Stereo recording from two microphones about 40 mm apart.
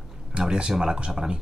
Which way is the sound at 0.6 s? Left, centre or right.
Centre.